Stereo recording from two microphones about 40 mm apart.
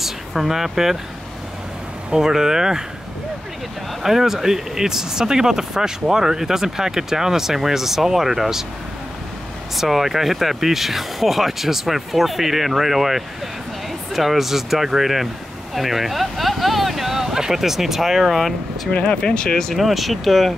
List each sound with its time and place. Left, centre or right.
0.0 s speech: centre
2.0 s speech: centre
4.0 s speech: centre
9.8 s speech: centre
18.9 s speech: left
19.6 s speech: centre